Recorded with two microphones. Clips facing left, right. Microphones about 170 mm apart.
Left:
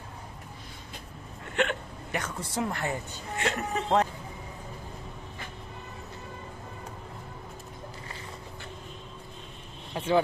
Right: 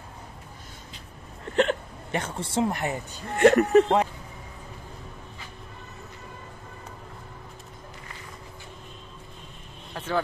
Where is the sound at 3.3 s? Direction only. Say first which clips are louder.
Right 14 dB; 60° right (ahead or behind).